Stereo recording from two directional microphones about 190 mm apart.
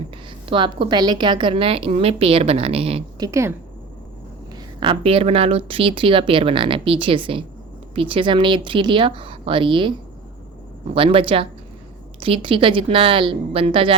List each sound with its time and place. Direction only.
0.4 s speech: 25° right (ahead or behind)
3.2 s speech: 15° right (ahead or behind)
4.5 s speech: 25° right (ahead or behind)
10.9 s speech: 30° right (ahead or behind)